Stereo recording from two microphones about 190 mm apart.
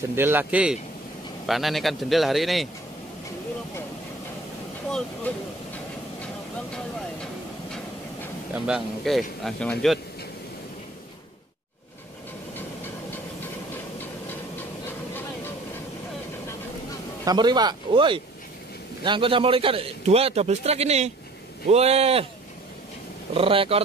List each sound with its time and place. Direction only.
0.1 s a man's voice: 10° right (ahead or behind)
8.6 s a man's voice: centre (ahead or behind)
17.2 s a man's voice: 20° right (ahead or behind)
23.3 s a man's voice: 30° right (ahead or behind)